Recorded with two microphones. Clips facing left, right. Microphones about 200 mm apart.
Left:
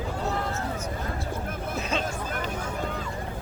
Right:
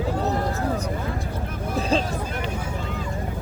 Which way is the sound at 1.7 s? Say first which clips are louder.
Right 8 dB; 35° right (ahead or behind).